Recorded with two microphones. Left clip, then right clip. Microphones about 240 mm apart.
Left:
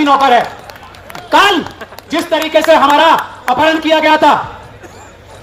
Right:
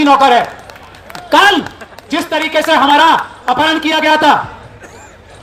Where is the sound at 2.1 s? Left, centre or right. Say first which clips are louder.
Left 2 dB; right.